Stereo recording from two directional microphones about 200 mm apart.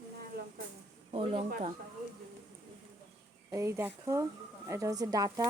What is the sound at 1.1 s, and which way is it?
Speech, 25° right (ahead or behind).